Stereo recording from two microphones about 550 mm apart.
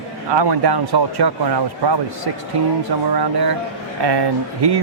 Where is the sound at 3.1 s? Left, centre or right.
Right.